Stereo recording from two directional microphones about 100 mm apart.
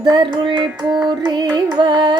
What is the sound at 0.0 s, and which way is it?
Child singing, 50° right (ahead or behind).